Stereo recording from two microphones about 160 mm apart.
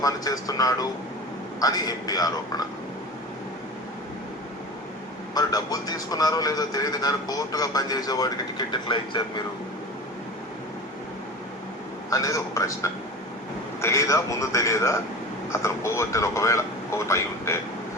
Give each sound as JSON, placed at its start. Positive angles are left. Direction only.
{"t": 0.0, "sound": "a man's voice", "side_deg": 20}
{"t": 5.3, "sound": "a man's voice", "side_deg": 25}
{"t": 12.1, "sound": "a man's voice", "side_deg": 20}